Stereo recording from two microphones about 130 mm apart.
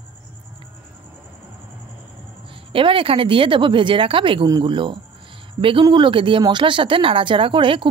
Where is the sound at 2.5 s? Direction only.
40° right (ahead or behind).